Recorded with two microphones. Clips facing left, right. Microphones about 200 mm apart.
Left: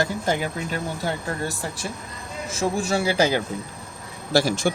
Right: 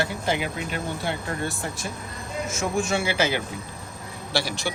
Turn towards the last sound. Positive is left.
turn(degrees=45)  # may be behind; listen again after turning